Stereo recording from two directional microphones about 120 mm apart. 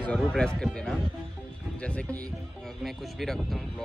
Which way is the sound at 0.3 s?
5° left (ahead or behind).